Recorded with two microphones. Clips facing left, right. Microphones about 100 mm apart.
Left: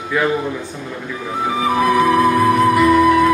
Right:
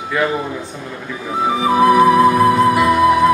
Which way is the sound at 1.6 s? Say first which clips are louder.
Right 4 dB; 20° right (ahead or behind).